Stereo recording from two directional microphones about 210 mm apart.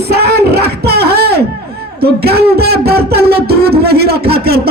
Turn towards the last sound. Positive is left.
turn(degrees=-50)  # may be behind; listen again after turning